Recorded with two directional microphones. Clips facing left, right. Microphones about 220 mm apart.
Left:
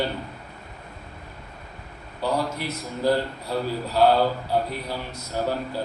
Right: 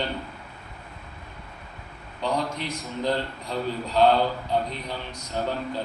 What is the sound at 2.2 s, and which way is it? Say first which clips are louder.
A man's voice: left 2 dB; 10° left (ahead or behind).